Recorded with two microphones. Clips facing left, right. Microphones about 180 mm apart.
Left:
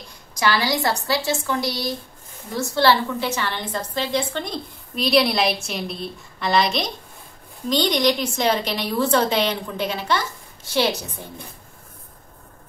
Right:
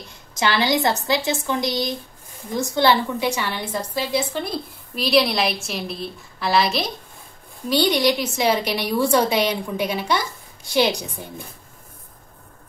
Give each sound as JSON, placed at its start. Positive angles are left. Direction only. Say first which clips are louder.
{"t": 0.3, "sound": "a woman's voice", "louder": "right 1 dB", "side_deg": -20}